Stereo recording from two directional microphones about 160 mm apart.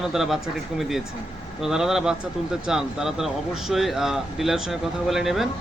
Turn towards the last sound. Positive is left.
turn(degrees=0)  # may be behind; listen again after turning